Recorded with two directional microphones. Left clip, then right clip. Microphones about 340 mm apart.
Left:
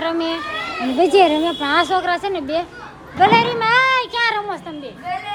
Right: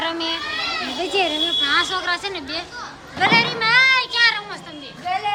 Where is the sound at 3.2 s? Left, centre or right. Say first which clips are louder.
Left 3 dB; centre.